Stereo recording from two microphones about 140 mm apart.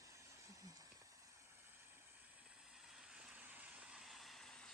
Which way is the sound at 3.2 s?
10° right (ahead or behind).